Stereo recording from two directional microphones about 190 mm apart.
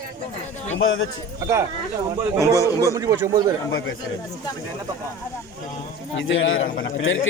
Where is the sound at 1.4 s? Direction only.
15° right (ahead or behind).